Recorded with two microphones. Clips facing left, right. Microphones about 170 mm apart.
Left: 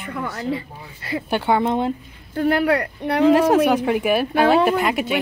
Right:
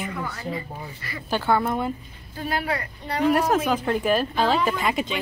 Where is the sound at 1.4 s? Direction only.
20° left (ahead or behind).